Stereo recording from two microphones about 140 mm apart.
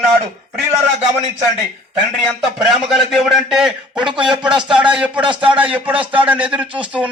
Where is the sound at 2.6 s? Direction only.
Centre (ahead or behind).